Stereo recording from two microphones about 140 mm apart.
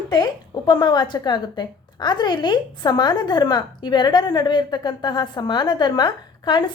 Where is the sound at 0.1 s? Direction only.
30° left (ahead or behind).